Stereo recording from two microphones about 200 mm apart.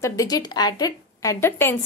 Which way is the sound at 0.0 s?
20° left (ahead or behind).